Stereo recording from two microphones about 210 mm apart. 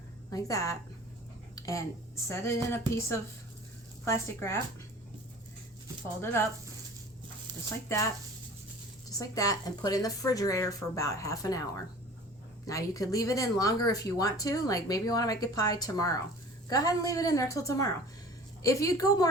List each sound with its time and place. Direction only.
0.3 s speech: 15° left (ahead or behind)
1.5 s a sound: 15° left (ahead or behind)
2.2 s speech: 15° left (ahead or behind)
7.9 s speech: 15° left (ahead or behind)